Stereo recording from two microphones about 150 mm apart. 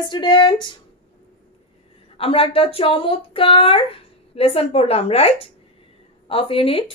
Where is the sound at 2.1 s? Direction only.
40° left (ahead or behind).